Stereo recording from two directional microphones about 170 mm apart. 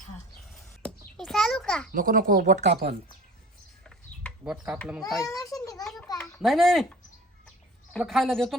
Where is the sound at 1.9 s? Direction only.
55° right (ahead or behind).